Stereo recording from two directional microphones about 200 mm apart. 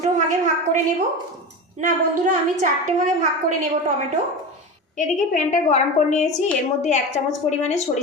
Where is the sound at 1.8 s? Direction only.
35° right (ahead or behind).